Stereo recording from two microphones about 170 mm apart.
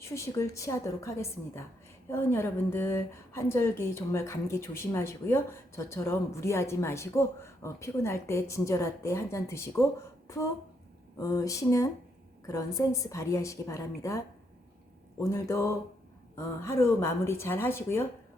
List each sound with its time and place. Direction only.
0.0 s a woman's voice: 15° left (ahead or behind)